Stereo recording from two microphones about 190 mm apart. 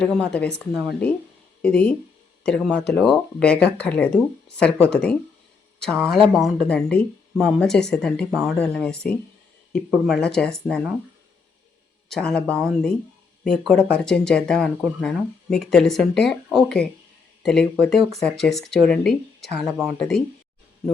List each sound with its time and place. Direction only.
0.0 s speech: 5° left (ahead or behind)
12.0 s speech: 5° left (ahead or behind)